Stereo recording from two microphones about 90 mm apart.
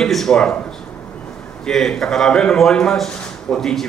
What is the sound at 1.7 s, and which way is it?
A man's voice, 5° left (ahead or behind).